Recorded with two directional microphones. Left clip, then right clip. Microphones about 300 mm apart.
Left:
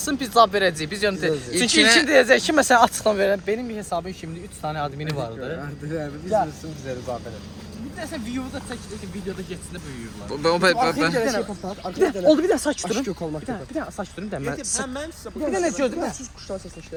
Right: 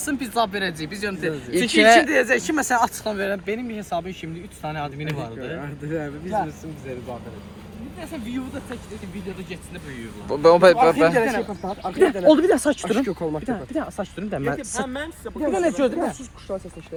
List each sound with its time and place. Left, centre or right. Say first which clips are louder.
0.1 s speech: left 6 dB; centre
1.6 s speech: right 3 dB; centre
2.0 s speech: left 4 dB; left; by 5.3 s centre
5.5 s a man's voice: right 1 dB; centre
10.2 s speech: right 6 dB; centre
11.9 s speech: right 2 dB; right